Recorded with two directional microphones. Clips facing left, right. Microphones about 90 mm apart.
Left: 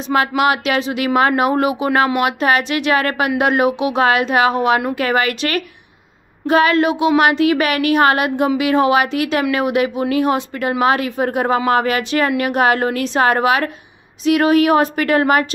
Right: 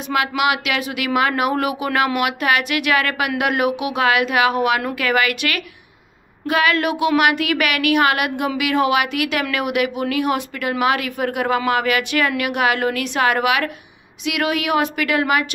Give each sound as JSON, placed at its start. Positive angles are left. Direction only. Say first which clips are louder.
{"t": 0.4, "sound": "a woman's voice", "louder": "left 4 dB", "side_deg": 35}